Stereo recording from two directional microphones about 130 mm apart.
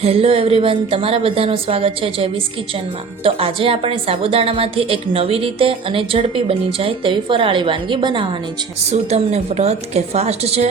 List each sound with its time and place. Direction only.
0.0 s a woman's voice: 50° right (ahead or behind)
8.9 s a woman's voice: 55° right (ahead or behind)